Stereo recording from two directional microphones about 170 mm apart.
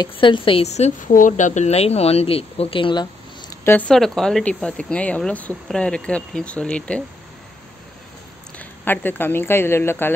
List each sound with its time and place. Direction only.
0.0 s a woman's voice: 30° left (ahead or behind)
3.6 s speech: 10° left (ahead or behind)
8.5 s speech: 10° left (ahead or behind)